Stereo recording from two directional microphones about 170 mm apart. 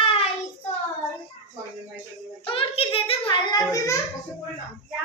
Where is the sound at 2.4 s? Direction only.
30° left (ahead or behind).